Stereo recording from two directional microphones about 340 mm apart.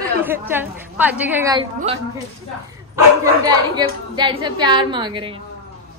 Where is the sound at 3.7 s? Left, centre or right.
Centre.